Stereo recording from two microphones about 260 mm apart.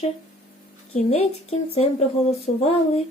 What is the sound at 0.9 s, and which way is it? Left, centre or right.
Speech, left.